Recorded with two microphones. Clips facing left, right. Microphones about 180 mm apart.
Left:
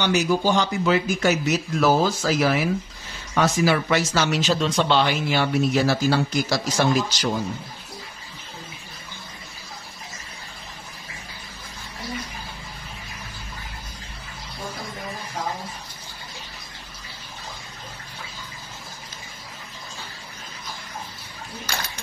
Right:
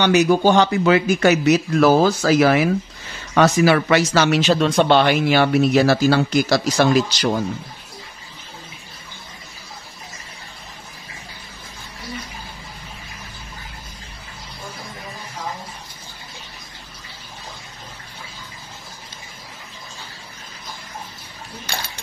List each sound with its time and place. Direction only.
0.0 s speech: 65° right (ahead or behind)